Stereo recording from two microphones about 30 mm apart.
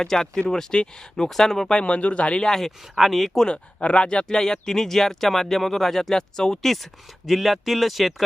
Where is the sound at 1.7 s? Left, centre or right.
Left.